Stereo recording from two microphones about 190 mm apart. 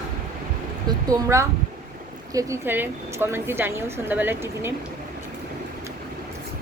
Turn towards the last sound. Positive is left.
turn(degrees=-10)  # may be behind; listen again after turning